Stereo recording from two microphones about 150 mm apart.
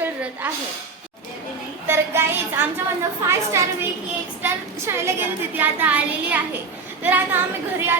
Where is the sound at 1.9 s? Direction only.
15° right (ahead or behind).